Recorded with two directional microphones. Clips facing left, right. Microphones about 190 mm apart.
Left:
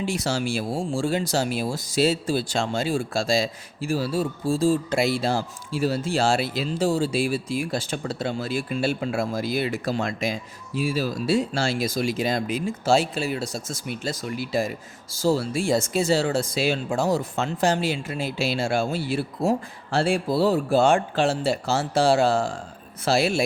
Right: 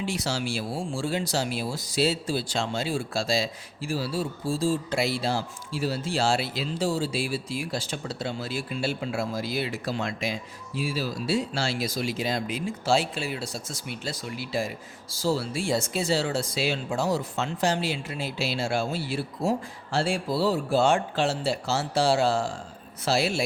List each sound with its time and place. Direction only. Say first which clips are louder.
0.0 s speech: left 4 dB; 50° left (ahead or behind)